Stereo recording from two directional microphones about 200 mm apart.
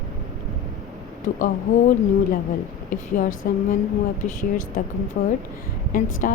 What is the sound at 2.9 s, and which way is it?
Speech, 40° left (ahead or behind).